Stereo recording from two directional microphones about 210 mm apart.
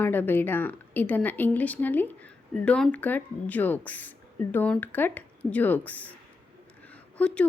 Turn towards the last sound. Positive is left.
turn(degrees=5)  # may be behind; listen again after turning